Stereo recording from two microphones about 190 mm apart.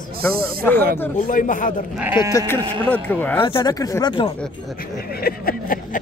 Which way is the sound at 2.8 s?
10° left (ahead or behind).